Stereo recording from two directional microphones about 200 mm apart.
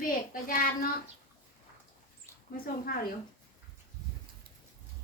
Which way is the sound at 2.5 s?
45° left (ahead or behind).